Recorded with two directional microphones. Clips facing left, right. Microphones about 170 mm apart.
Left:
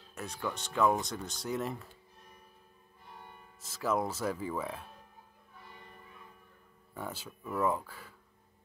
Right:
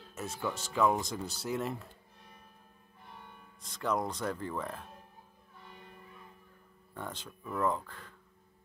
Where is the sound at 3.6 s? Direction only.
5° left (ahead or behind).